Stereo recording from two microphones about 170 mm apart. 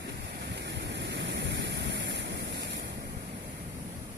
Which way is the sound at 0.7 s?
85° right.